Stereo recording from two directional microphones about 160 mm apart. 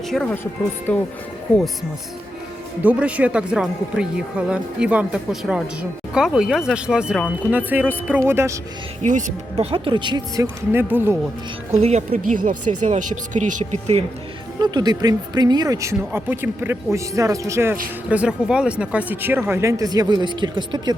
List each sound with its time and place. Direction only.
0.1 s speech: 5° left (ahead or behind)
2.8 s speech: 10° right (ahead or behind)
9.6 s speech: 35° right (ahead or behind)
10.7 s speech: 15° right (ahead or behind)
11.7 s speech: 45° right (ahead or behind)
14.6 s speech: 25° right (ahead or behind)
18.1 s speech: 5° right (ahead or behind); by 20.9 s 30° right (ahead or behind)